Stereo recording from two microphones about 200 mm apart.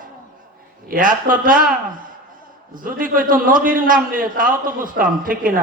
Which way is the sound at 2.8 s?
45° right (ahead or behind).